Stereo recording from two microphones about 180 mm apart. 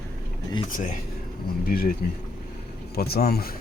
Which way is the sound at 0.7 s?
45° left (ahead or behind).